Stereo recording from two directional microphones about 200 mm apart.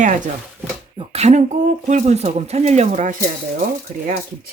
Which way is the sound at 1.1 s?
35° right (ahead or behind).